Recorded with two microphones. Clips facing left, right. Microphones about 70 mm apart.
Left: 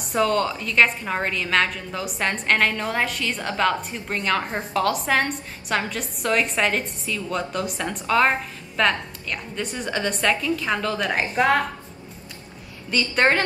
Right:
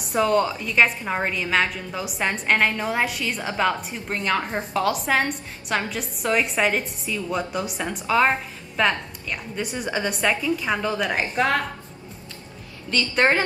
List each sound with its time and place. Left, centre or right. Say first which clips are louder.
0.1 s a woman's voice: right 1 dB; centre
11.0 s a woman's voice: left 1 dB; centre
12.9 s a woman's voice: even; centre